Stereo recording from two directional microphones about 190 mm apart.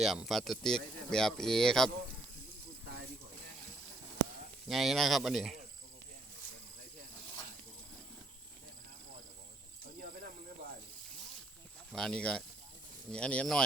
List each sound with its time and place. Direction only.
0.0 s speech: centre (ahead or behind)
4.7 s speech: centre (ahead or behind)
9.8 s snake: 50° right (ahead or behind)
11.9 s speech: centre (ahead or behind)